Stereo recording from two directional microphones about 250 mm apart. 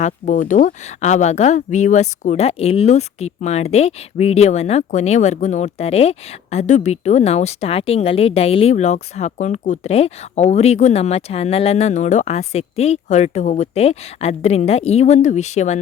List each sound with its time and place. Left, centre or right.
0.0 s speech: left